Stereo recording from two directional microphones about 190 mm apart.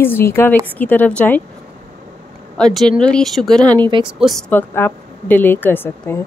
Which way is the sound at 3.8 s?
25° right (ahead or behind).